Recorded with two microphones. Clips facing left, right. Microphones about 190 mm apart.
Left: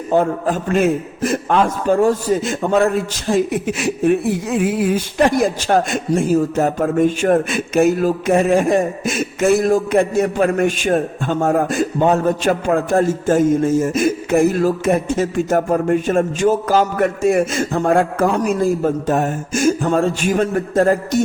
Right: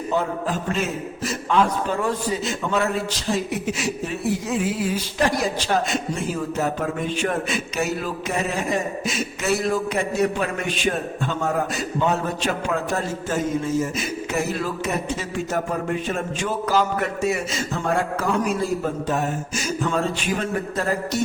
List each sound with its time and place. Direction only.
0.1 s a man's voice: 50° left (ahead or behind)